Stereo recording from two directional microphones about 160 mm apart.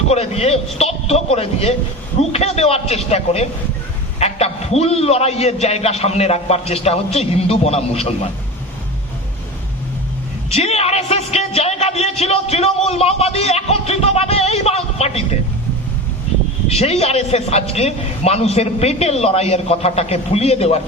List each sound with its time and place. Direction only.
0.1 s a man's voice: 40° left (ahead or behind)
10.5 s a man's voice: 40° left (ahead or behind)
16.6 s a man's voice: 40° left (ahead or behind)